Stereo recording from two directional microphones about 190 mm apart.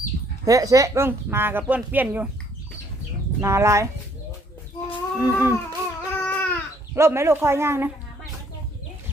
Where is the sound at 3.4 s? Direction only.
15° right (ahead or behind).